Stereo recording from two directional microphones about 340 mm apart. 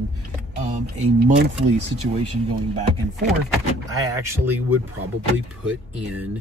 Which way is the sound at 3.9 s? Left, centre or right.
Centre.